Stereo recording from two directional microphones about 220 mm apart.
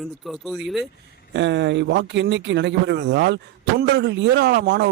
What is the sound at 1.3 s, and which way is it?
Speech, 55° right (ahead or behind).